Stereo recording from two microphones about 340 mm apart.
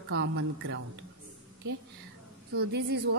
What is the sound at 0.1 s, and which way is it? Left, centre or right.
Speech, right.